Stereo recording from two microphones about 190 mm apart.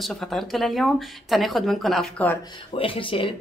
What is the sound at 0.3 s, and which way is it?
Speech, centre (ahead or behind).